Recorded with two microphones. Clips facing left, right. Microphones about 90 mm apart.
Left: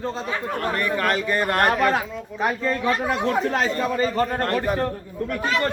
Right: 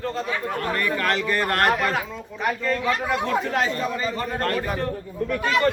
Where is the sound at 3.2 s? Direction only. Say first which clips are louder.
Left 2 dB; 35° left (ahead or behind).